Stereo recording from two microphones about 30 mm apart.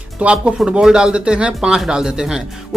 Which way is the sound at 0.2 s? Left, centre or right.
Right.